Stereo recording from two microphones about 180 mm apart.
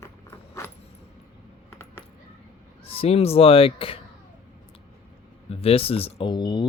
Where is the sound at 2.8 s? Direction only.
30° left (ahead or behind).